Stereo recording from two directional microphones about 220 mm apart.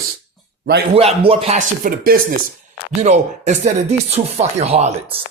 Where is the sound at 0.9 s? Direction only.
25° right (ahead or behind).